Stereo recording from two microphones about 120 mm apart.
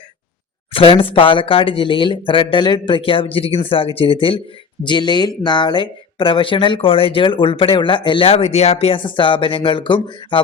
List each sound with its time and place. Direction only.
0.7 s speech: 50° left (ahead or behind)